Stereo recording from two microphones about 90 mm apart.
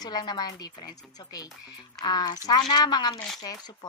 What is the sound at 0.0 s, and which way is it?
Speech, 50° left (ahead or behind).